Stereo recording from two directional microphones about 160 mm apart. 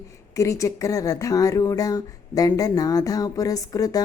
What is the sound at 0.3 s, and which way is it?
Speech, 20° left (ahead or behind).